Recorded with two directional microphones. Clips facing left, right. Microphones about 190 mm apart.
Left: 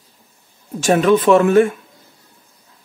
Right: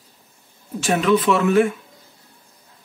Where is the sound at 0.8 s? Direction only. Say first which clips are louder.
Left 5 dB; 45° left (ahead or behind).